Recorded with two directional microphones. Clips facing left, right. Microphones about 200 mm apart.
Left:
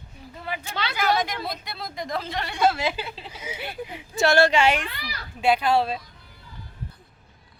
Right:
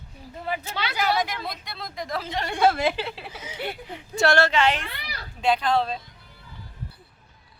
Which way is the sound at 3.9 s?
5° left (ahead or behind).